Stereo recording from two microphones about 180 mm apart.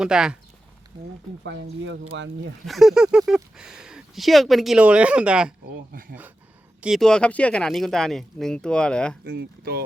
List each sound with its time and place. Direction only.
0.0 s speech: 5° right (ahead or behind)
1.5 s speech: 80° right
2.6 s speech: centre (ahead or behind)
5.9 s speech: 55° right (ahead or behind)
6.8 s speech: centre (ahead or behind)
9.2 s speech: 55° right (ahead or behind)